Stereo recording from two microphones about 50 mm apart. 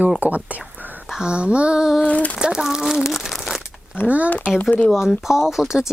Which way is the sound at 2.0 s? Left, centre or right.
Left.